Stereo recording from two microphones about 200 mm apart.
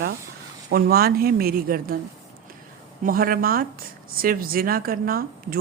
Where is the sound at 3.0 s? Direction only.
45° right (ahead or behind).